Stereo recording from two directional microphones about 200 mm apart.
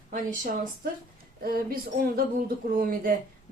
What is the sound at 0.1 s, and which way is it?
A woman's voice, 45° right (ahead or behind).